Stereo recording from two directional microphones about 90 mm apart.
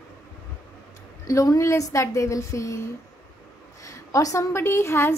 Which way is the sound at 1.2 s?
35° left (ahead or behind).